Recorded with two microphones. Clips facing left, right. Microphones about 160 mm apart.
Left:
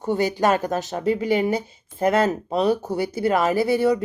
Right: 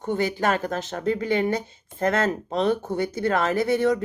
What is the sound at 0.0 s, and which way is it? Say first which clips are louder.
Speech: left 3 dB; 40° left (ahead or behind).